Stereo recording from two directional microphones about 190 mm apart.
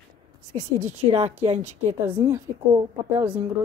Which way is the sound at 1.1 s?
35° right (ahead or behind).